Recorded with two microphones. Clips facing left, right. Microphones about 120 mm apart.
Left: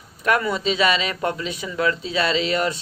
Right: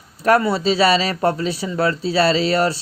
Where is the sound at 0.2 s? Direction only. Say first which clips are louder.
Right 5 dB; 35° right (ahead or behind).